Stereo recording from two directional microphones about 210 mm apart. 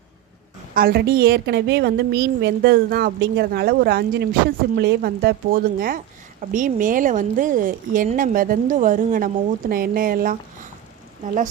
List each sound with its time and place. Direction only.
0.7 s a woman's voice: 45° right (ahead or behind)